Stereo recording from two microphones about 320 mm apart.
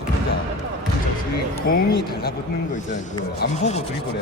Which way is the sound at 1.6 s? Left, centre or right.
Left.